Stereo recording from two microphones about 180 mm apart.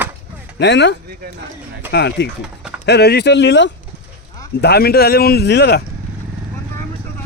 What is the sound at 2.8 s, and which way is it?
Speech, 65° left (ahead or behind).